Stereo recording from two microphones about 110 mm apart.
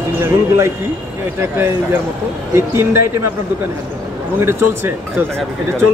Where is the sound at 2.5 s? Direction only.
25° right (ahead or behind).